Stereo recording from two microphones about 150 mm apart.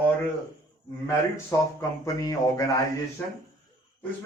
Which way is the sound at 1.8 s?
25° left (ahead or behind).